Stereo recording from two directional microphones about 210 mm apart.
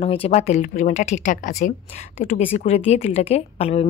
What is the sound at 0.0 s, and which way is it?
Speech, 30° left (ahead or behind).